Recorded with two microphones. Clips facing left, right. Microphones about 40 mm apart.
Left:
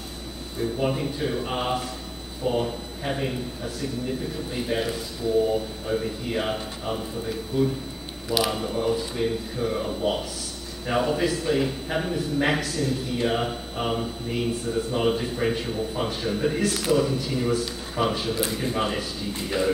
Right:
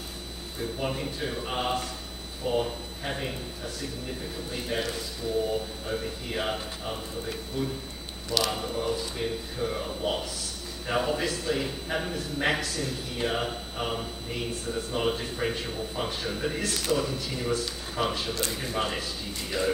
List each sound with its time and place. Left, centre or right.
0.6 s a man's voice: centre